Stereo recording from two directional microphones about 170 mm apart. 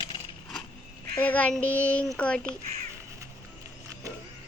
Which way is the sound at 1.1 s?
10° left (ahead or behind).